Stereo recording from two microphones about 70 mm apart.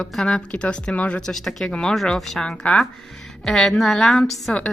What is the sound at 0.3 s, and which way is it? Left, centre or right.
A woman's voice, centre.